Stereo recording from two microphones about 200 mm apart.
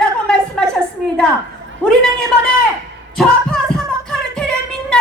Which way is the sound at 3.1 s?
Centre (ahead or behind).